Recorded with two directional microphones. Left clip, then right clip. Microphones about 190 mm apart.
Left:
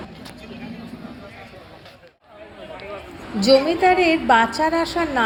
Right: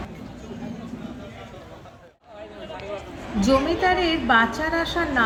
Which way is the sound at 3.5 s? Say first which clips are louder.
Left 5 dB; 30° left (ahead or behind).